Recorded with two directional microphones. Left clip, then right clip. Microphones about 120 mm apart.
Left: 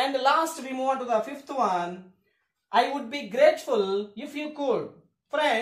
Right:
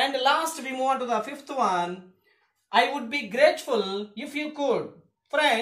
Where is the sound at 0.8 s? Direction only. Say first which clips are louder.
Even; 25° left (ahead or behind).